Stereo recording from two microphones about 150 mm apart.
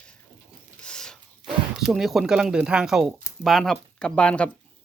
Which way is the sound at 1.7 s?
5° right (ahead or behind).